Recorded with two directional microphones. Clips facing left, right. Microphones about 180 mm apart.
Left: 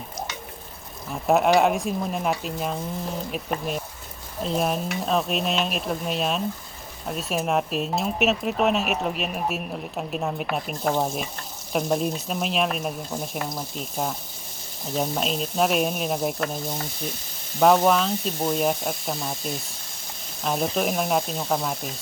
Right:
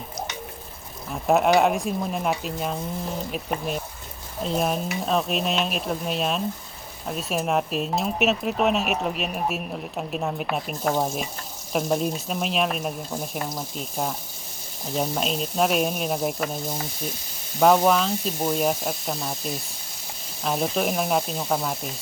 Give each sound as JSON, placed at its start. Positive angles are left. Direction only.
{"t": 1.1, "sound": "speech", "side_deg": 0}